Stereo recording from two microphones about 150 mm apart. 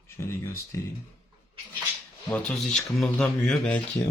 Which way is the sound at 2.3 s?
5° left (ahead or behind).